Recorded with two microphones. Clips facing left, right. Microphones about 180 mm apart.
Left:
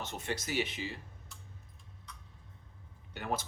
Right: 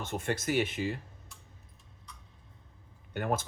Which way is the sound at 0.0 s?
50° right (ahead or behind).